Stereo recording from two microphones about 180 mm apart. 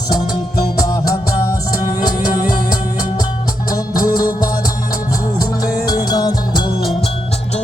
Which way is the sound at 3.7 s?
20° left (ahead or behind).